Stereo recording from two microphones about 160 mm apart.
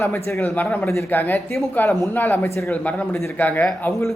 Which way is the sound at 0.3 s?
15° left (ahead or behind).